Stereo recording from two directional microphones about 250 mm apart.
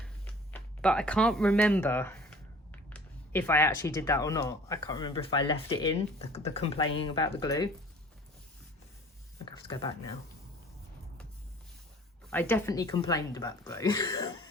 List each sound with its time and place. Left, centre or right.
0.5 s speech: centre
9.6 s speech: centre
12.3 s speech: centre